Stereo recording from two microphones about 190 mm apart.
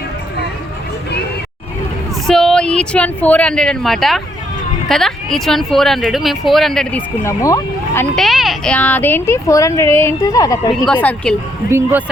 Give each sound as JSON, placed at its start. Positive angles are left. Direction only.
{"t": 2.2, "sound": "speech", "side_deg": 0}
{"t": 7.3, "sound": "speech", "side_deg": 15}
{"t": 8.1, "sound": "speech", "side_deg": 0}
{"t": 10.8, "sound": "speech", "side_deg": 5}
{"t": 11.7, "sound": "speech", "side_deg": -10}